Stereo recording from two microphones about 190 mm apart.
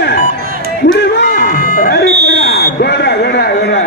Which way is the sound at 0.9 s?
65° left (ahead or behind).